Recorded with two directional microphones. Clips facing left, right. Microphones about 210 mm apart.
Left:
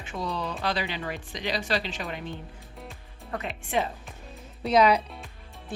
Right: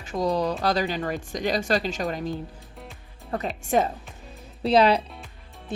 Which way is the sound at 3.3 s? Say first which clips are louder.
Right 5 dB; 35° right (ahead or behind).